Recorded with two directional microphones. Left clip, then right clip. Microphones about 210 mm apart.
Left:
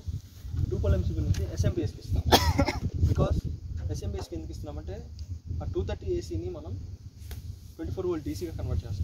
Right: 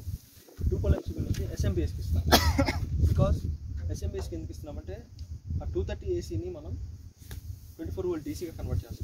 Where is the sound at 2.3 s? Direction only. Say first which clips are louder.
Left 1 dB; 55° right (ahead or behind).